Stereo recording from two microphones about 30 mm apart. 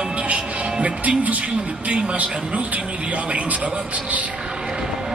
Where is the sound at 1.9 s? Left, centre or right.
Right.